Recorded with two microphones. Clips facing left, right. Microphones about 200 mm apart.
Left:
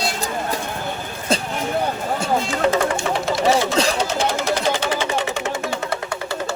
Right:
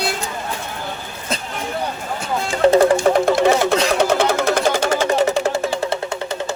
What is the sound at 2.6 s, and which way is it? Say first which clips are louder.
Music: right 10 dB; 35° right (ahead or behind).